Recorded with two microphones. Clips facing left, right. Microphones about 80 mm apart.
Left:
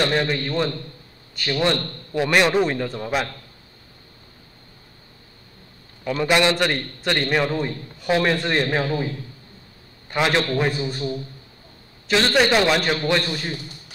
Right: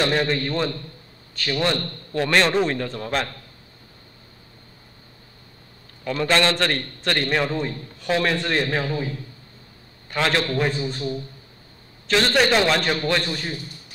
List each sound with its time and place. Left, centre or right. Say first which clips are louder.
0.0 s a man's voice: even; centre
6.0 s a man's voice: left 1 dB; centre
10.1 s a man's voice: left 2 dB; centre
10.5 s a man's voice: left 1 dB; centre